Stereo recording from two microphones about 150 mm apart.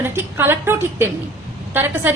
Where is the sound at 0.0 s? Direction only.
15° right (ahead or behind).